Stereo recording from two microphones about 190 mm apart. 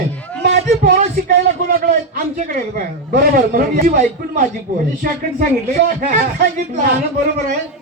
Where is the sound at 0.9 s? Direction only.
45° right (ahead or behind).